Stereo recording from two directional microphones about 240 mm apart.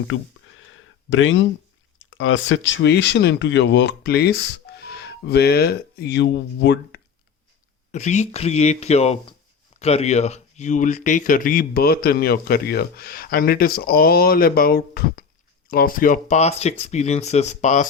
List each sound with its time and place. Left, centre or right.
0.1 s speech: left
7.9 s speech: left